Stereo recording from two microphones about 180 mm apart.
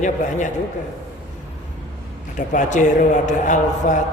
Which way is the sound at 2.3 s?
45° left (ahead or behind).